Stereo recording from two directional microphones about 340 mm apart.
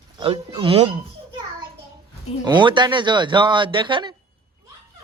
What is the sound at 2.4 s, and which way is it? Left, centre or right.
Speech, centre.